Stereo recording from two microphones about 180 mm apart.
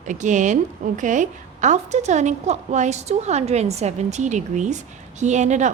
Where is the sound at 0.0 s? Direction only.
45° right (ahead or behind).